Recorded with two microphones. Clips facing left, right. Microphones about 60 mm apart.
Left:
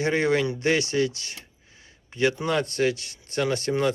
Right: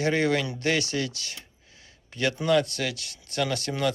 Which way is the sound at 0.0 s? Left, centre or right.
Left.